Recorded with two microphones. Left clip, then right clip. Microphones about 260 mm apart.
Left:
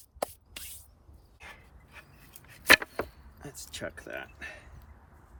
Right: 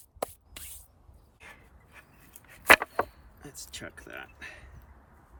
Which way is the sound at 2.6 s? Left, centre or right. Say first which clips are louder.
Right 2 dB; right.